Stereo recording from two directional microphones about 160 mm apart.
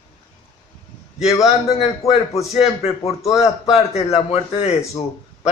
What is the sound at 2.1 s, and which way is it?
A man's voice, 40° left (ahead or behind).